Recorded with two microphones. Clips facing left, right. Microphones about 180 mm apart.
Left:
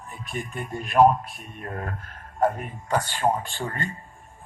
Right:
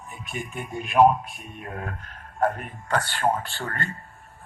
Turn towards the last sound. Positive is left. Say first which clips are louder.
# left 1 dB
turn(degrees=15)  # may be behind; listen again after turning